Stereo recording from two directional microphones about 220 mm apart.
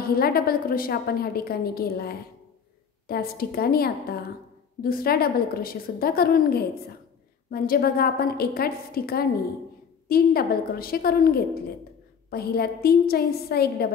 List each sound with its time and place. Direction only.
0.0 s a woman's voice: 45° left (ahead or behind)